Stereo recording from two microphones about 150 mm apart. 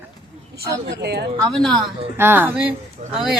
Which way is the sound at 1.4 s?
5° left (ahead or behind).